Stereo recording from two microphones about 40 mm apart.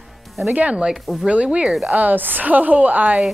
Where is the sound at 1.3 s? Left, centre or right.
Right.